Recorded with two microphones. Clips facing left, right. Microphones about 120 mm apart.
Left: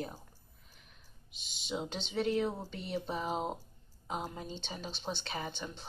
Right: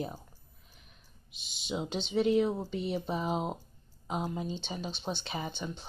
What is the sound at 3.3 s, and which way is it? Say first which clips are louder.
Speech: right 3 dB; 5° right (ahead or behind).